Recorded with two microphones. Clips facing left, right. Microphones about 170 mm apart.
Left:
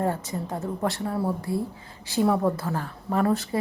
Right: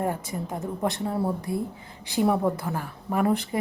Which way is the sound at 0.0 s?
15° right (ahead or behind).